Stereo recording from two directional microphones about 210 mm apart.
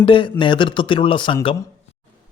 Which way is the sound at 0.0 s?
25° left (ahead or behind).